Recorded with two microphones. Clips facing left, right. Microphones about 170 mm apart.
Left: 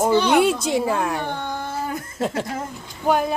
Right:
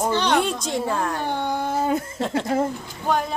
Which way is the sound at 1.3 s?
15° right (ahead or behind).